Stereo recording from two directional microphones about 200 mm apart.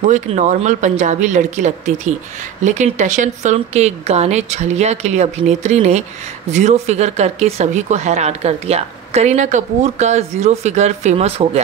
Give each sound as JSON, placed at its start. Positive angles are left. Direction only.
{"t": 0.0, "sound": "speech", "side_deg": -40}